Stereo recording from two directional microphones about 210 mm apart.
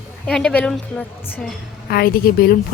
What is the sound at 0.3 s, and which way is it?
Speech, 5° left (ahead or behind).